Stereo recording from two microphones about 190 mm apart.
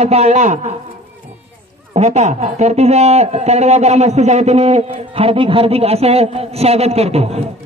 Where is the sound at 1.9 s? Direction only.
35° right (ahead or behind).